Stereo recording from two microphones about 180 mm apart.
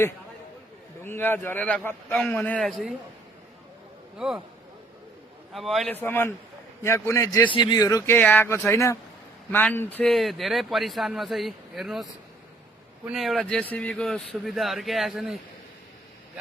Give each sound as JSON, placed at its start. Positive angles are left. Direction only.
{"t": 1.0, "sound": "a man's voice", "side_deg": 10}
{"t": 5.5, "sound": "a man's voice", "side_deg": 0}
{"t": 6.0, "sound": "a man's voice", "side_deg": 10}
{"t": 7.8, "sound": "a man's voice", "side_deg": 15}
{"t": 13.1, "sound": "a man's voice", "side_deg": 0}